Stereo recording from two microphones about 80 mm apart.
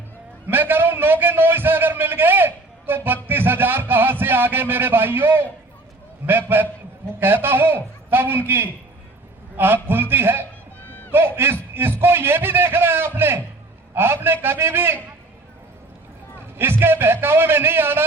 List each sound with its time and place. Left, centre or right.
0.4 s a sound: right
3.2 s a man's voice: right
6.5 s a man's voice: right
10.8 s a sound: left
11.1 s a man's voice: right
16.6 s a man's voice: right